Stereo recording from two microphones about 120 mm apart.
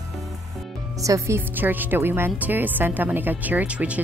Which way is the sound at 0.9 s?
25° right (ahead or behind).